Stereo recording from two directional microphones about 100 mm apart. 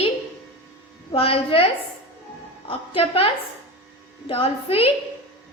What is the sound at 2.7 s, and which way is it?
Speech, 75° left (ahead or behind).